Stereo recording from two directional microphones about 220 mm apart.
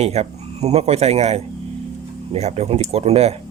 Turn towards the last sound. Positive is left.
turn(degrees=-30)  # may be behind; listen again after turning